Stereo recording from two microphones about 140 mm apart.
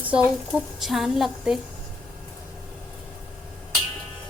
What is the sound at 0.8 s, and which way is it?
Speech, centre (ahead or behind).